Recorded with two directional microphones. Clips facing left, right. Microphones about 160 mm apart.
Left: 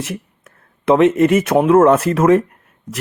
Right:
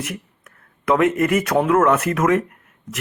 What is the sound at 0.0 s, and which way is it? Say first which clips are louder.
Speech: left 3 dB; 25° left (ahead or behind).